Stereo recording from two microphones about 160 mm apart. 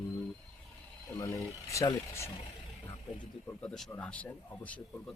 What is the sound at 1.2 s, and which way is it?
Speech, 20° left (ahead or behind).